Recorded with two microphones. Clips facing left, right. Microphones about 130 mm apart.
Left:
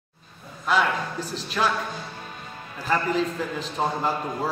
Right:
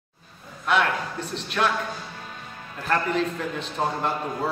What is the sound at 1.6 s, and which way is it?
Speech, 5° left (ahead or behind).